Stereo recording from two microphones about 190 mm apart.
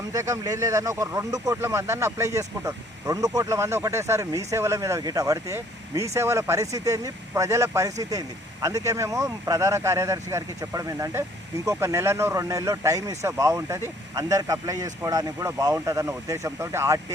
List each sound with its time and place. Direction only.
0.1 s speech: 15° right (ahead or behind)